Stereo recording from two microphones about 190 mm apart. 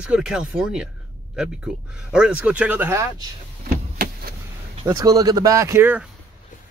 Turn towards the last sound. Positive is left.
turn(degrees=-10)  # may be behind; listen again after turning